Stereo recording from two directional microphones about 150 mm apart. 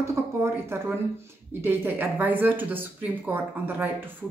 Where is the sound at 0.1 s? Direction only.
20° right (ahead or behind).